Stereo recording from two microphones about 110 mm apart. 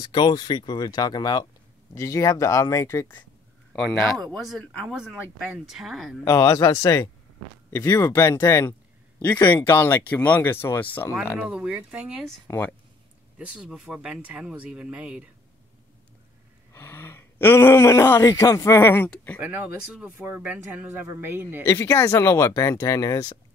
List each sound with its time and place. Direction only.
0.0 s speech: 40° left (ahead or behind); by 3.2 s 25° left (ahead or behind)
3.7 s speech: centre (ahead or behind)
6.2 s speech: 35° left (ahead or behind); by 11.1 s 15° left (ahead or behind)
11.4 s speech: 10° right (ahead or behind)
12.4 s speech: 20° left (ahead or behind)
13.4 s speech: 10° right (ahead or behind)
16.7 s speech: 20° left (ahead or behind)
19.4 s speech: 15° right (ahead or behind)
21.6 s speech: 25° left (ahead or behind)